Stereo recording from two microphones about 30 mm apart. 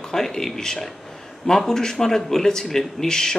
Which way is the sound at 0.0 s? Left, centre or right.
Centre.